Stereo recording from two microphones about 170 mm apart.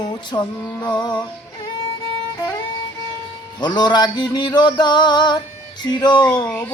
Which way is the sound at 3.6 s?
25° left (ahead or behind).